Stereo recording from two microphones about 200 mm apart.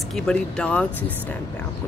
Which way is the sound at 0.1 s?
5° left (ahead or behind).